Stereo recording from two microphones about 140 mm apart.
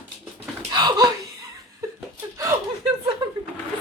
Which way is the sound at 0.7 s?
30° right (ahead or behind).